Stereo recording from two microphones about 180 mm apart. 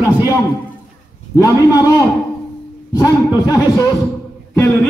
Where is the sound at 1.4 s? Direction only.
20° left (ahead or behind).